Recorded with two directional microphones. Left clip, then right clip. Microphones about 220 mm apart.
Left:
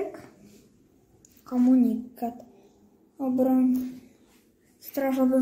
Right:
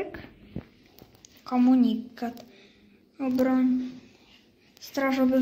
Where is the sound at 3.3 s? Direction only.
Centre (ahead or behind).